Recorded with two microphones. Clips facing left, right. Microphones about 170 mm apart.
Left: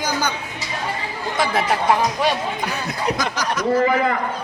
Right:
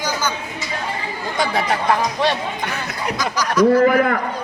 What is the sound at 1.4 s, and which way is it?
Speech, centre (ahead or behind).